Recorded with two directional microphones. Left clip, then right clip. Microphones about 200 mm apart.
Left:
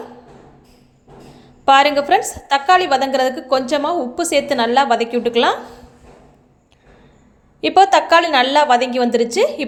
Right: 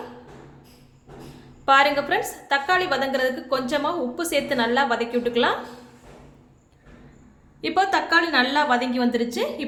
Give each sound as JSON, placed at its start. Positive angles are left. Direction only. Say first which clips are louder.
{"t": 1.6, "sound": "a woman's voice", "louder": "left 6 dB", "side_deg": 30}
{"t": 7.6, "sound": "a woman's voice", "louder": "left 10 dB", "side_deg": 35}